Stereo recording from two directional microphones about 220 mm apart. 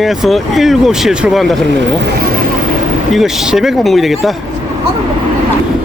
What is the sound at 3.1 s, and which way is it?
Speech, centre (ahead or behind).